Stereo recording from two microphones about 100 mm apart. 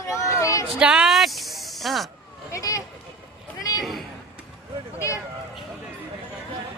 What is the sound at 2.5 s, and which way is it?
Vehicle, 35° left (ahead or behind).